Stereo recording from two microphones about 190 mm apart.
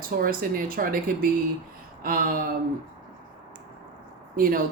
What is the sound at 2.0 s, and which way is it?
Speech, 50° right (ahead or behind).